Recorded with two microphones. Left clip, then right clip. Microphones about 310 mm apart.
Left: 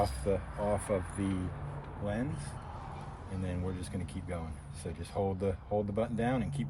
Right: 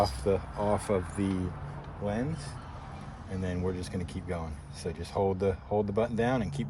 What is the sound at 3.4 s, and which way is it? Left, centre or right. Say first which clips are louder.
Speech: right 7 dB; right.